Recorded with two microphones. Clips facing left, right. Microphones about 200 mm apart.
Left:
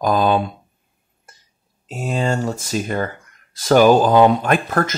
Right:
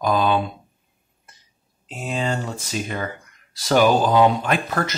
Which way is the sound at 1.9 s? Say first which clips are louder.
Left 4 dB; 45° left (ahead or behind).